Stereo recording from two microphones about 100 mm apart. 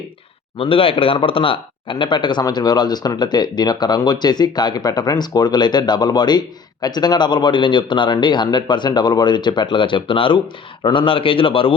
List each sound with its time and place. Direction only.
0.6 s a man's voice: 65° left (ahead or behind)